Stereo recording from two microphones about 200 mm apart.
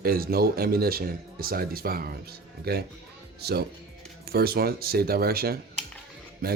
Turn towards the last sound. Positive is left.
turn(degrees=-50)  # may be behind; listen again after turning